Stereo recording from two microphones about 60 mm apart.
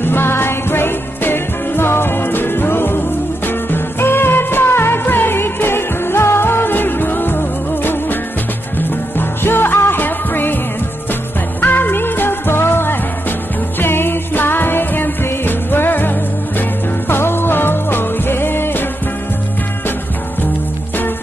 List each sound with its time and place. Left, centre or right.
0.0 s music: left
11.6 s music: left
17.1 s music: left